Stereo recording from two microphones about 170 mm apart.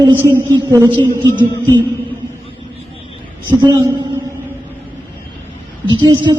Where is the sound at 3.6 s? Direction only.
25° right (ahead or behind).